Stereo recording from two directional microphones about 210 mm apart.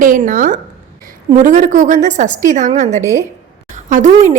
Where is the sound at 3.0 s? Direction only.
15° right (ahead or behind).